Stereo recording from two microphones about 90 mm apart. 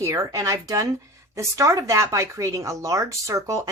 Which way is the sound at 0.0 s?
35° right (ahead or behind).